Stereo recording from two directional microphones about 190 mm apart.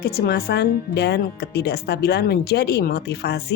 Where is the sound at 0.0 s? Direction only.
55° left (ahead or behind).